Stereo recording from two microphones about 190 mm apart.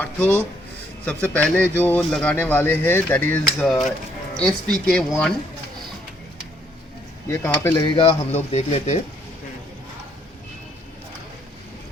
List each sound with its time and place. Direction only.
0.0 s a man's voice: 10° left (ahead or behind)
7.3 s speech: 15° left (ahead or behind); by 9.0 s 35° left (ahead or behind)